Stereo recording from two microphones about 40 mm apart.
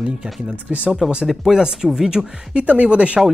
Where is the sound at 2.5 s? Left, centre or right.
Right.